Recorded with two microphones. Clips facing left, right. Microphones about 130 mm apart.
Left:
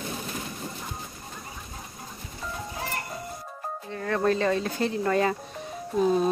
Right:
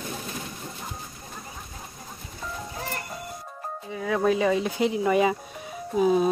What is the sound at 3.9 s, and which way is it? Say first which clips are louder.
Speech: right 2 dB; 5° right (ahead or behind).